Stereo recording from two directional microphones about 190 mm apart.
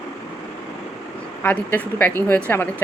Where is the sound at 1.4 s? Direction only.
10° left (ahead or behind).